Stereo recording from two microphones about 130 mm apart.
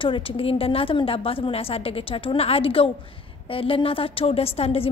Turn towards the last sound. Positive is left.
turn(degrees=50)  # may be behind; listen again after turning